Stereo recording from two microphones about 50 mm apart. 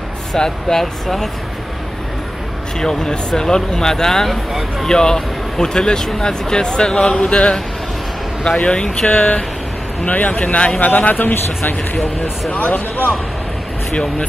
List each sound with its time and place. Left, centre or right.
0.3 s a man's voice: centre
2.8 s a man's voice: centre
8.5 s a man's voice: centre
9.1 s speech: left
10.9 s speech: left
12.4 s speech: left